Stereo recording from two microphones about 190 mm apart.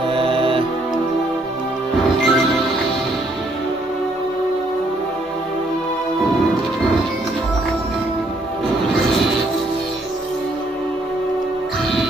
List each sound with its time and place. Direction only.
0.1 s music: 30° right (ahead or behind)
2.1 s music: centre (ahead or behind)